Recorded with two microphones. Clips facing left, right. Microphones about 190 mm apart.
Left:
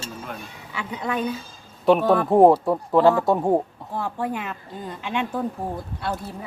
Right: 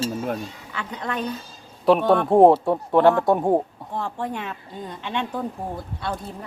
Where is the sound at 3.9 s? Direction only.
5° left (ahead or behind).